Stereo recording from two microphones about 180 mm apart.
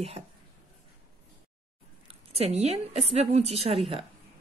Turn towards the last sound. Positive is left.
turn(degrees=-30)  # may be behind; listen again after turning